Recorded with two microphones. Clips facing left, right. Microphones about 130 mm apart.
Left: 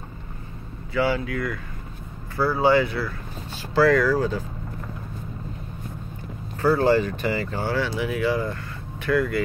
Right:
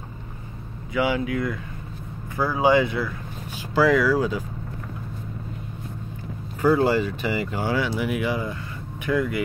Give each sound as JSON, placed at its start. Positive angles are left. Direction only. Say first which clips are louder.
{"t": 0.9, "sound": "speech", "louder": "even", "side_deg": -15}
{"t": 6.6, "sound": "speech", "louder": "even", "side_deg": -10}